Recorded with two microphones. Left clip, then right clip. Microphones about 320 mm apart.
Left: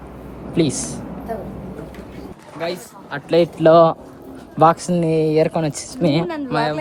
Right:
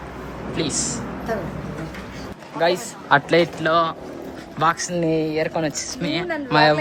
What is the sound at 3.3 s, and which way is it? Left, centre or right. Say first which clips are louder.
A woman's voice: left 5 dB; centre.